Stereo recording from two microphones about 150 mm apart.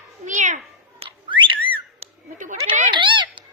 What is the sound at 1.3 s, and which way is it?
Whistling, 30° right (ahead or behind).